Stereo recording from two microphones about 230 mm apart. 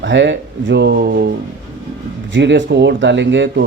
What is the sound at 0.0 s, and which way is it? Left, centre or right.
Speech, right.